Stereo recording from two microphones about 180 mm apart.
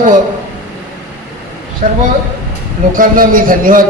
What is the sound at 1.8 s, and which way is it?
A man's voice, 40° right (ahead or behind).